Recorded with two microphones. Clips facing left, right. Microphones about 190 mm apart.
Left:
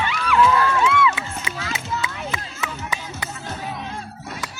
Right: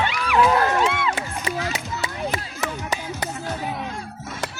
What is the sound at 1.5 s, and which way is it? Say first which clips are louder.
Music: right 2 dB; 35° right (ahead or behind).